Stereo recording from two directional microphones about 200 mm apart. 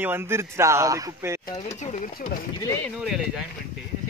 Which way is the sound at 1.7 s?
35° left (ahead or behind).